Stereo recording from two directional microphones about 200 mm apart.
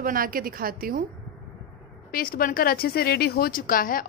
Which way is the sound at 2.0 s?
45° left (ahead or behind).